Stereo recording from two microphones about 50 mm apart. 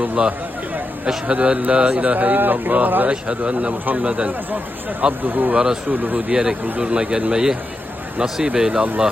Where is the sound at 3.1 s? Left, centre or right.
Right.